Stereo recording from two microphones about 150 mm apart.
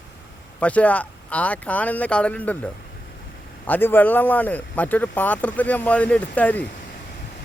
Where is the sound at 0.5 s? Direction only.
10° left (ahead or behind).